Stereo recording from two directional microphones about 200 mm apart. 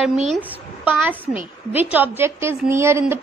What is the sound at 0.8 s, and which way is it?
A woman's voice, 10° right (ahead or behind).